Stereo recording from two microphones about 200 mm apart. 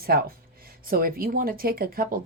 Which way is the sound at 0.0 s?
50° right (ahead or behind).